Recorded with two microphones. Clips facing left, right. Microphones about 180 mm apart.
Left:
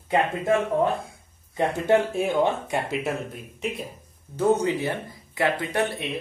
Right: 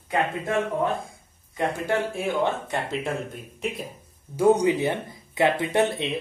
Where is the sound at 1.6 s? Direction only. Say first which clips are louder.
Left 4 dB; 20° left (ahead or behind); by 3.8 s centre (ahead or behind).